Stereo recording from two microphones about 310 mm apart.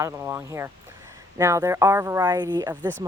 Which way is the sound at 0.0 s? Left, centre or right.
Centre.